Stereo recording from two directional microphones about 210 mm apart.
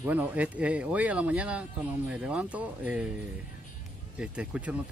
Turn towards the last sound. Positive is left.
turn(degrees=-5)  # may be behind; listen again after turning